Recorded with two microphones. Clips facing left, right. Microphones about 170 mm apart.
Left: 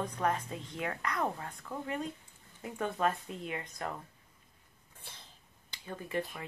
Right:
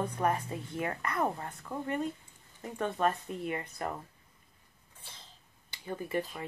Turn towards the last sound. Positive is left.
turn(degrees=-5)  # may be behind; listen again after turning